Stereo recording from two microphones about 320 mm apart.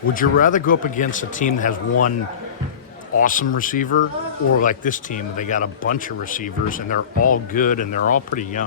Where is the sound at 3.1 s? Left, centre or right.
Left.